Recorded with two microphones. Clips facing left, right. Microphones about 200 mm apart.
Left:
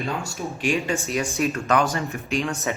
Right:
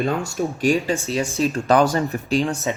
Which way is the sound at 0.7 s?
30° right (ahead or behind).